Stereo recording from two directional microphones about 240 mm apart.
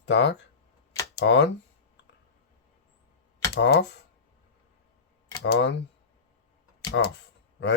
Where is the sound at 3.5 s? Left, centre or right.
Left.